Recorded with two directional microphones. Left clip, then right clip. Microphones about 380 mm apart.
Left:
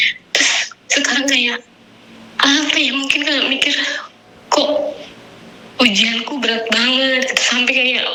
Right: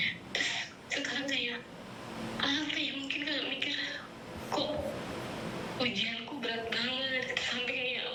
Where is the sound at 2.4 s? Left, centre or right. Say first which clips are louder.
Left 19 dB; left.